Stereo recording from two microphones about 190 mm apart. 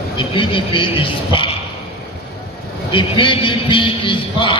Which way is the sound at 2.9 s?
25° left (ahead or behind).